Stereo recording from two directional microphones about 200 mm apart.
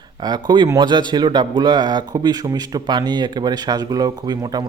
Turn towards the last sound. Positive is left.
turn(degrees=-20)  # may be behind; listen again after turning